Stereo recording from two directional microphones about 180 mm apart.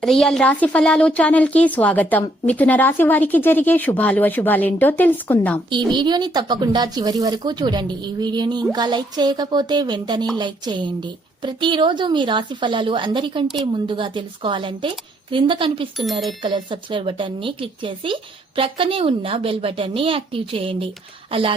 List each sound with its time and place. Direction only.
0.0 s speech: centre (ahead or behind)
5.7 s speech: 25° right (ahead or behind)